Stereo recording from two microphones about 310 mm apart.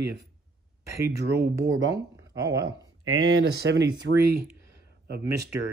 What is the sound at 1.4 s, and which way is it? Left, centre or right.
Speech, right.